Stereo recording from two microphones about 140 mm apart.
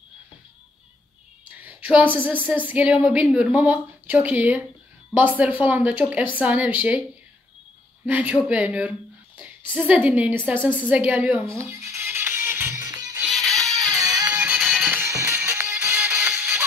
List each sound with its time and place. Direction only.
1.6 s a sound: 15° right (ahead or behind)
2.2 s a woman's voice: 15° right (ahead or behind)
8.0 s a woman's voice: 10° right (ahead or behind)
10.9 s music: 10° right (ahead or behind)
13.3 s music: centre (ahead or behind)
13.9 s music: 25° right (ahead or behind)
14.3 s music: 10° right (ahead or behind)
14.9 s music: 15° right (ahead or behind)